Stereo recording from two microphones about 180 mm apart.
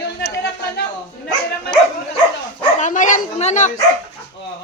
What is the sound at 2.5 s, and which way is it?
Speech, 45° left (ahead or behind).